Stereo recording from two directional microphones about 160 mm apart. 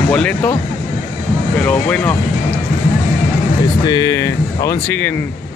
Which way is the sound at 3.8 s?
25° left (ahead or behind).